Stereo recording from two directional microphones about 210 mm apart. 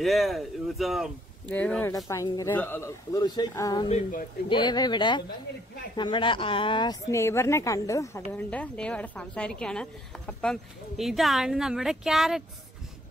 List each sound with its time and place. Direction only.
0.0 s a woman's voice: centre (ahead or behind); by 3.9 s 20° left (ahead or behind)
3.9 s speech: 40° left (ahead or behind)
4.5 s a woman's voice: 20° left (ahead or behind); by 12.4 s centre (ahead or behind)